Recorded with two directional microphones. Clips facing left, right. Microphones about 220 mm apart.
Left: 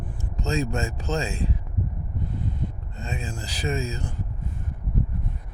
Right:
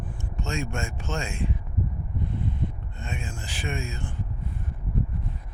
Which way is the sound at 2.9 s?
35° left (ahead or behind).